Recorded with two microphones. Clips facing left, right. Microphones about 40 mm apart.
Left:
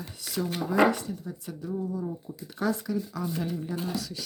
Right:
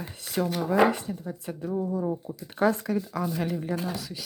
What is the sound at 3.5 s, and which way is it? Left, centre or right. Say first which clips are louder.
Speech: right 3 dB; right.